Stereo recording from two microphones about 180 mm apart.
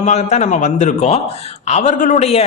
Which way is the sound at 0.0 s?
40° left (ahead or behind).